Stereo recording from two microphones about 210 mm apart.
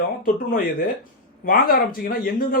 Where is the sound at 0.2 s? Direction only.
45° left (ahead or behind).